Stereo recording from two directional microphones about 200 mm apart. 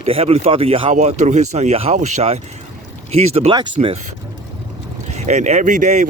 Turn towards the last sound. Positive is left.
turn(degrees=-35)  # may be behind; listen again after turning